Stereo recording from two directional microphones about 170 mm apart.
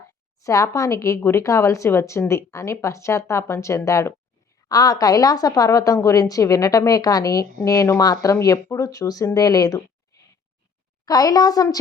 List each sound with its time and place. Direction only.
0.0 s a woman's voice: 20° left (ahead or behind)
11.0 s a woman's voice: 20° left (ahead or behind)